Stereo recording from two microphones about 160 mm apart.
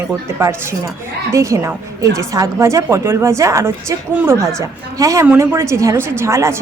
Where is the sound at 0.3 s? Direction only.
15° right (ahead or behind).